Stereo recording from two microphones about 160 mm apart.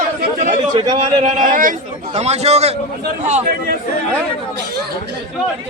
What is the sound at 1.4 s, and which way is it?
A man's voice, 60° right (ahead or behind).